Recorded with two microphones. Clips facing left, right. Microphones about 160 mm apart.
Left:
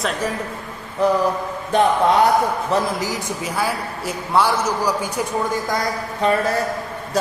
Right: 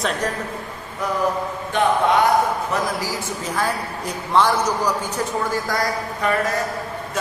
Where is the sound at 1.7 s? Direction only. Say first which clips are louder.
Left 3 dB; 35° left (ahead or behind).